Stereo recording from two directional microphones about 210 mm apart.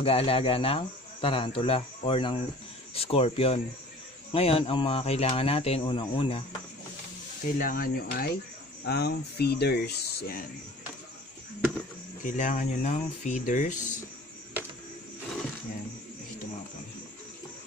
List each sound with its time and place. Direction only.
0.0 s speech: 25° left (ahead or behind)
7.5 s speech: 40° left (ahead or behind)
12.2 s speech: 35° left (ahead or behind)